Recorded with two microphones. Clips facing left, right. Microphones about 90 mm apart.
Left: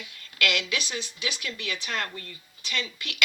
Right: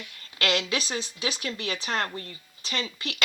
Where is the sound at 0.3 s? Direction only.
35° right (ahead or behind).